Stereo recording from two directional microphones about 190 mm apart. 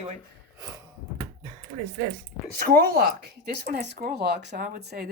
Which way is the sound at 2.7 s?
55° right (ahead or behind).